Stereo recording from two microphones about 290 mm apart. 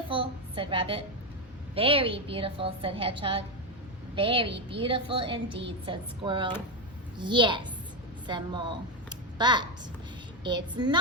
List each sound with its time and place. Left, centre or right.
0.1 s a woman's voice: centre